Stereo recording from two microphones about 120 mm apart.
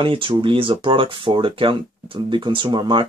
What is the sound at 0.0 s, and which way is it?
Speech, 45° right (ahead or behind).